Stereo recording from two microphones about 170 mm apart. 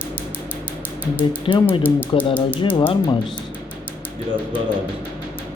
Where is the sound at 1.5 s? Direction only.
30° left (ahead or behind).